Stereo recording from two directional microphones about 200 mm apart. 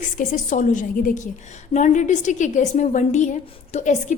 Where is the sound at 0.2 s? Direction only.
40° left (ahead or behind).